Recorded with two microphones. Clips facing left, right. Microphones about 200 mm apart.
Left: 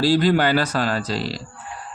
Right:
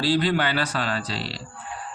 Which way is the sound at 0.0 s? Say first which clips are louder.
Left 5 dB; 45° left (ahead or behind).